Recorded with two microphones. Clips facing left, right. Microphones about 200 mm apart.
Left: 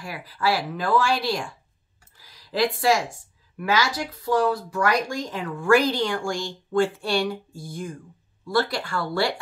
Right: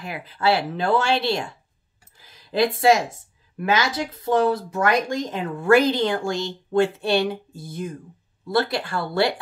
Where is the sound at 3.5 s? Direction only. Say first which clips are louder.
Right 2 dB; 20° right (ahead or behind).